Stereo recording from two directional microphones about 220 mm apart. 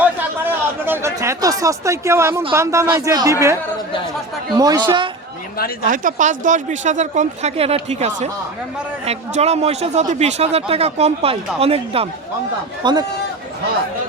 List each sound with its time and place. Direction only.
0.0 s a sound: 10° right (ahead or behind)
2.5 s speech: 10° right (ahead or behind)
4.5 s speech: 15° right (ahead or behind)
5.5 s speech: 45° left (ahead or behind)
5.9 s speech: 35° right (ahead or behind); by 13.1 s 20° right (ahead or behind)